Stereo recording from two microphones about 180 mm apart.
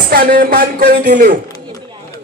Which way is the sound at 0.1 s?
55° right (ahead or behind).